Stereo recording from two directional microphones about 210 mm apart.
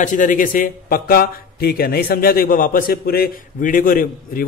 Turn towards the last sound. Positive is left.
turn(degrees=40)  # may be behind; listen again after turning